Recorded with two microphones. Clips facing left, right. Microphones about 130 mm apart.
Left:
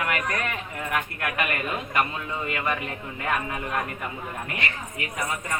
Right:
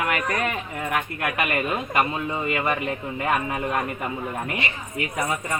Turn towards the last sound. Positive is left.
turn(degrees=-20)  # may be behind; listen again after turning